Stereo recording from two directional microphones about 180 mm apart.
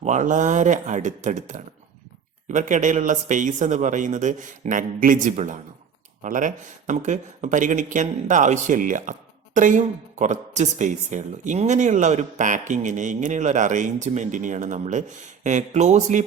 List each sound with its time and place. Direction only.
0.0 s speech: 45° right (ahead or behind)